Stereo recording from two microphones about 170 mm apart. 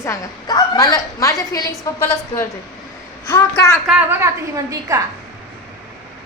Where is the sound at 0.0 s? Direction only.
20° left (ahead or behind).